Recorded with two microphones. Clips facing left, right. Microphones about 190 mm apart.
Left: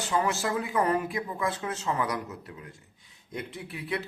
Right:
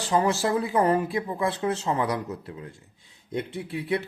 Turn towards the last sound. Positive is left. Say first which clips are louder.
# right 6 dB
turn(degrees=-25)  # may be behind; listen again after turning